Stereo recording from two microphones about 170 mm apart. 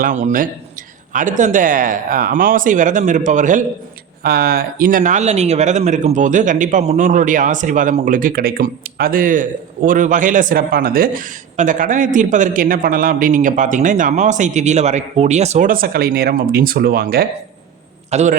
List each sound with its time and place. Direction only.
0.0 s speech: 45° right (ahead or behind)
4.2 s speech: 65° right (ahead or behind)
18.1 s a man's voice: 40° right (ahead or behind)